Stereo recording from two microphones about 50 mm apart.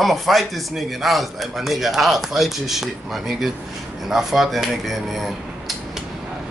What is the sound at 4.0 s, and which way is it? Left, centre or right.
Cutlery, centre.